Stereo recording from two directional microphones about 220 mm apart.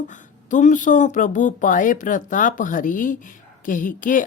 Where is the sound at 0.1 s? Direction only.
35° left (ahead or behind).